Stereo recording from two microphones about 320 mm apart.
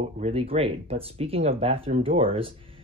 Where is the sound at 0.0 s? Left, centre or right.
Centre.